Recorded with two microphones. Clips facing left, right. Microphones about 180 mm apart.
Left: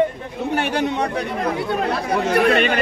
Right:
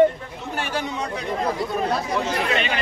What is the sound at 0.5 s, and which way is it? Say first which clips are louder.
Speech: left 6 dB; 65° left (ahead or behind).